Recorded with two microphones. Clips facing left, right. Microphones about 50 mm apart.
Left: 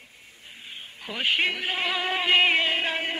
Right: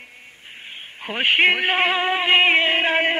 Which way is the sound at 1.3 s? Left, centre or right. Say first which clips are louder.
Right 9 dB; right.